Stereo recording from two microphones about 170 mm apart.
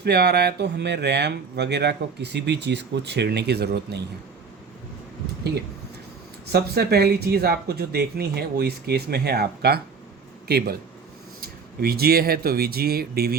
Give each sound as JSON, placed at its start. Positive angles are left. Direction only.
{"t": 0.0, "sound": "speech", "side_deg": -75}
{"t": 6.5, "sound": "speech", "side_deg": -70}